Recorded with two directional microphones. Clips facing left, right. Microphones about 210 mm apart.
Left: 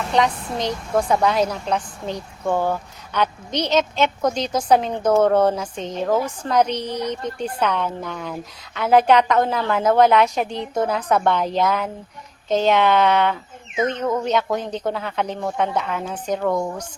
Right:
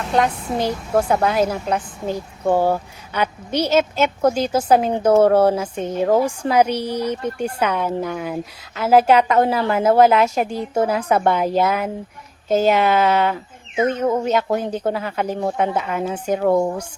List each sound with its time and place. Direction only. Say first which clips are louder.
0.0 s a woman's voice: right 1 dB; centre (ahead or behind)
2.4 s speech: right 4 dB; 30° right (ahead or behind)
3.1 s a woman's voice: right 1 dB; 10° right (ahead or behind)